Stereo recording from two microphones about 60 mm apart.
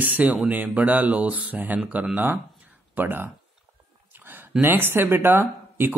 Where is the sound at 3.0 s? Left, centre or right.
Right.